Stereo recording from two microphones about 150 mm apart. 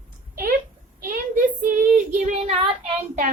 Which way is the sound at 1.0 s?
65° right (ahead or behind).